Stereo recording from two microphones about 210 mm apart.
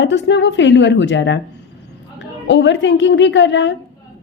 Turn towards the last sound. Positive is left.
turn(degrees=60)  # may be behind; listen again after turning